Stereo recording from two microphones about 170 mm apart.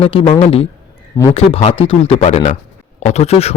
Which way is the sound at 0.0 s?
35° left (ahead or behind).